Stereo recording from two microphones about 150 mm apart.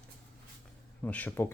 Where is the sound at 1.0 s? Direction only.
10° left (ahead or behind).